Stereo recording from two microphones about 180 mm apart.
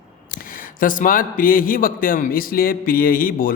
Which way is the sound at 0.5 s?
50° left (ahead or behind).